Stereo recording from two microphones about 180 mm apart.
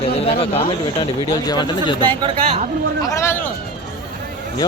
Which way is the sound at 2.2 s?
35° right (ahead or behind).